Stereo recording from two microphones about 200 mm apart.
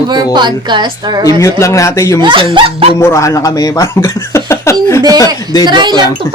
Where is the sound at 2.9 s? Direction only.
15° left (ahead or behind).